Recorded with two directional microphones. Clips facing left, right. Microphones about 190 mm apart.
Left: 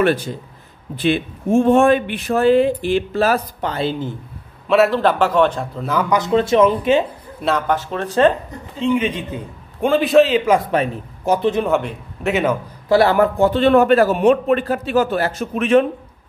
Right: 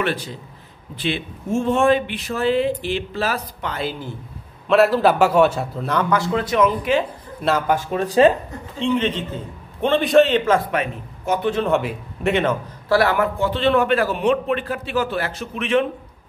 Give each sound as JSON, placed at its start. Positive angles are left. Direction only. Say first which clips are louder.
{"t": 0.0, "sound": "a man's voice", "louder": "left 7 dB", "side_deg": 45}
{"t": 3.7, "sound": "speech", "louder": "left 5 dB", "side_deg": 25}
{"t": 4.6, "sound": "a man's voice", "louder": "even", "side_deg": 0}
{"t": 6.0, "sound": "speech", "louder": "left 4 dB", "side_deg": 20}
{"t": 7.4, "sound": "speech", "louder": "even", "side_deg": -5}
{"t": 8.7, "sound": "a man's voice", "louder": "left 2 dB", "side_deg": 10}
{"t": 10.7, "sound": "speech", "louder": "left 4 dB", "side_deg": 30}
{"t": 11.7, "sound": "a man's voice", "louder": "left 1 dB", "side_deg": 0}
{"t": 12.8, "sound": "speech", "louder": "left 4 dB", "side_deg": 25}
{"t": 13.4, "sound": "a man's voice", "louder": "left 6 dB", "side_deg": 45}